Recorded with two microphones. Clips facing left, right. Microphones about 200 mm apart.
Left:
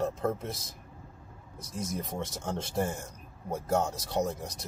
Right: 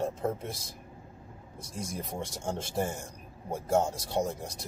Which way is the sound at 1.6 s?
30° right (ahead or behind).